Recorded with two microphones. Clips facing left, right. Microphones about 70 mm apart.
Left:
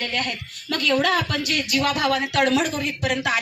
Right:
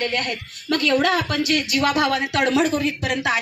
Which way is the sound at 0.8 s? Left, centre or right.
Right.